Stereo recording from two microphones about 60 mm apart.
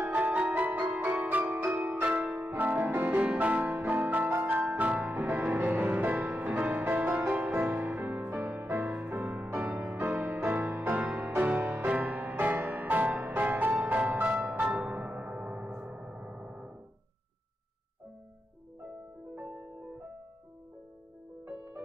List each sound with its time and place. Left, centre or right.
0.0 s music: right